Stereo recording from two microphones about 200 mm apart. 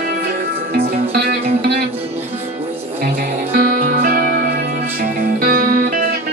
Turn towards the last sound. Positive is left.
turn(degrees=-50)  # may be behind; listen again after turning